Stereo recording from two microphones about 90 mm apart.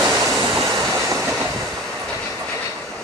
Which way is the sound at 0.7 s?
40° right (ahead or behind).